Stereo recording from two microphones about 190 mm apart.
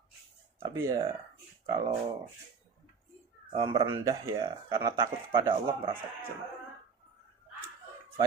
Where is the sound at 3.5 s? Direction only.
30° right (ahead or behind).